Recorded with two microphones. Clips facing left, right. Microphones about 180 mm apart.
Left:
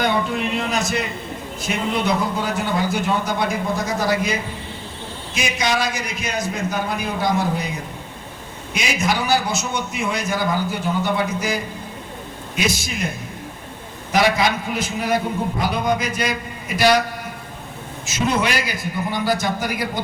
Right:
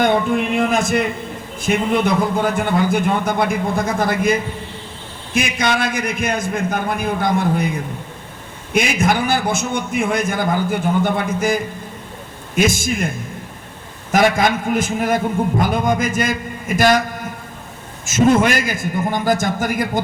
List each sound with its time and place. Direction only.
0.0 s a man's voice: 50° right (ahead or behind)
8.7 s a man's voice: 55° right (ahead or behind)
18.0 s a man's voice: 50° right (ahead or behind)